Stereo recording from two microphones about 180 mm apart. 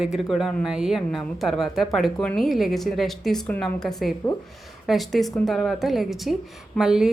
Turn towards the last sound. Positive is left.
turn(degrees=-5)  # may be behind; listen again after turning